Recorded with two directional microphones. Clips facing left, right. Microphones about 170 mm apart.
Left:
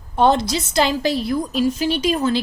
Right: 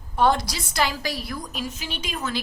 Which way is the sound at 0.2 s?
25° left (ahead or behind).